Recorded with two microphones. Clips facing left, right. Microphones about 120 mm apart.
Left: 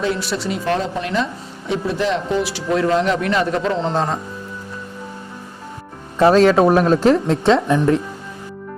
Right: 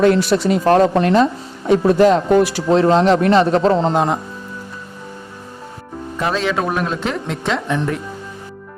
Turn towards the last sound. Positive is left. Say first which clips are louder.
# left 3 dB
turn(degrees=15)  # may be behind; listen again after turning